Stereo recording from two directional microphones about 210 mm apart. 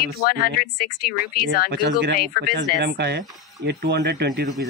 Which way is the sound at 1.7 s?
50° right (ahead or behind).